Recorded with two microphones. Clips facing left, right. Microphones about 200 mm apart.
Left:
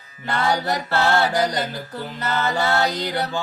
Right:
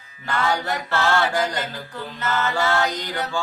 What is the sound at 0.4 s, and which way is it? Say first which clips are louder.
Mantra: left 3 dB; 35° left (ahead or behind).